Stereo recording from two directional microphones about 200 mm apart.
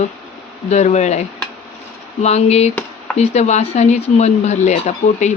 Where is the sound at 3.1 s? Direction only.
35° left (ahead or behind).